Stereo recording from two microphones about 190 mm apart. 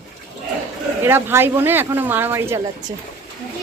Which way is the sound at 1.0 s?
10° right (ahead or behind).